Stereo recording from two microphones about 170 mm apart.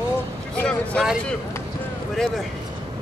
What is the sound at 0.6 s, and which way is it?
Vehicle, 5° left (ahead or behind).